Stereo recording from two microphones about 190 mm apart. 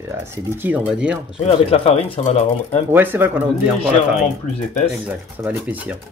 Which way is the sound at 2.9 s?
10° right (ahead or behind).